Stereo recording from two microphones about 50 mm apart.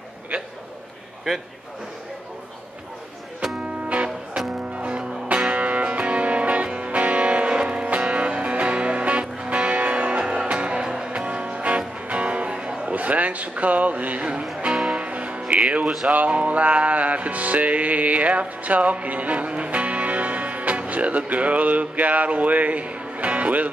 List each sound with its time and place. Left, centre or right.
3.5 s music: right
11.1 s music: right